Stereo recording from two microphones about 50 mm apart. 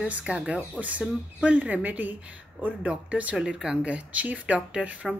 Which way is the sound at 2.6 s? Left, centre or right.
Right.